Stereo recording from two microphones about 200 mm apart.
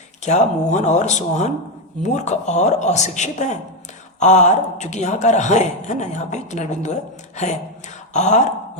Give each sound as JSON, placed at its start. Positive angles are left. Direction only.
{"t": 0.3, "sound": "a man's voice", "side_deg": 35}
{"t": 8.1, "sound": "speech", "side_deg": 35}